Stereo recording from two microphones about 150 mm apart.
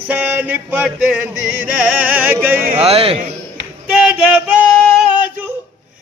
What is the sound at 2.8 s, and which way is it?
Speech, 40° right (ahead or behind).